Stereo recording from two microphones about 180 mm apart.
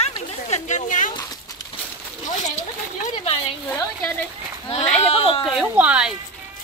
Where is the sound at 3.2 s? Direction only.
35° left (ahead or behind).